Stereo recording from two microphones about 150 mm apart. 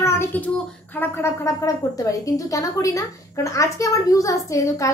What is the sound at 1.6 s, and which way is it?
A child's voice, 20° left (ahead or behind).